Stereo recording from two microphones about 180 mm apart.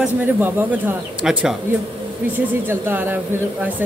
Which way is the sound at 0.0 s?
10° right (ahead or behind).